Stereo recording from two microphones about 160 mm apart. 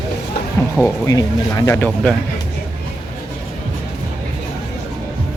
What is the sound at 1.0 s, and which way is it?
Speech, 20° left (ahead or behind).